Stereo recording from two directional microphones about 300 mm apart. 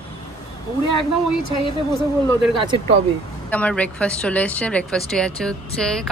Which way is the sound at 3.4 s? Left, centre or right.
Centre.